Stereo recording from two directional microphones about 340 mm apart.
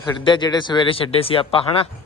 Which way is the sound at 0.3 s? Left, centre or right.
Centre.